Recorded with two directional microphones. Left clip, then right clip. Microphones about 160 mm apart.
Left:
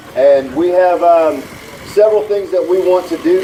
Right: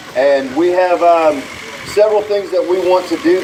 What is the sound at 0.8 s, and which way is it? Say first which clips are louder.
Speech: left 2 dB; 50° right (ahead or behind).